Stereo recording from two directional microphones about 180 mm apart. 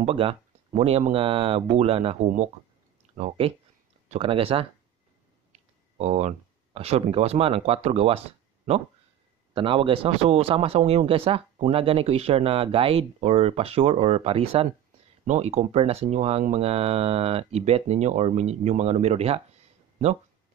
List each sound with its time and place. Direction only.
0.0 s speech: 30° right (ahead or behind)
9.5 s speech: 30° right (ahead or behind)